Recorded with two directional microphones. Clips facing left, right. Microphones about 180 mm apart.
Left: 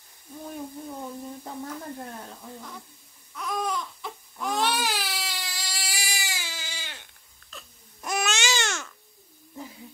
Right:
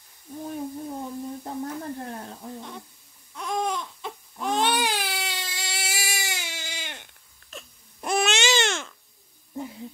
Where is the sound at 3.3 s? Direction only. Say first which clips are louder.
Right 2 dB; 25° right (ahead or behind).